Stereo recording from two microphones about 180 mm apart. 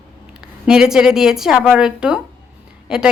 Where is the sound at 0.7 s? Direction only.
5° right (ahead or behind).